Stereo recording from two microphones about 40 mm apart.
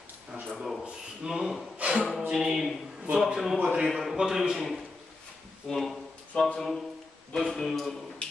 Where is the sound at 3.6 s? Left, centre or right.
Right.